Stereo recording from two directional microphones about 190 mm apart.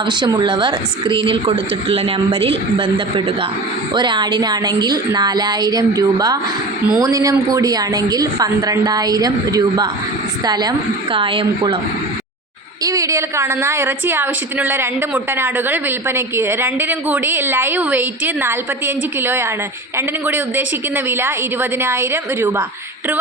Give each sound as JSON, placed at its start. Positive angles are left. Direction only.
{"t": 0.0, "sound": "a woman's voice", "side_deg": -25}
{"t": 12.8, "sound": "a woman's voice", "side_deg": -15}